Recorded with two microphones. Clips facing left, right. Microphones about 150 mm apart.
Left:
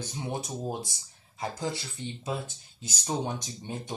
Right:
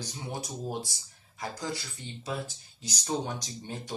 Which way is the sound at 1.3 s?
20° left (ahead or behind).